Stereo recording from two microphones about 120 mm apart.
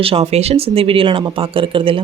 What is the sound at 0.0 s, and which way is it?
Speech, 55° right (ahead or behind).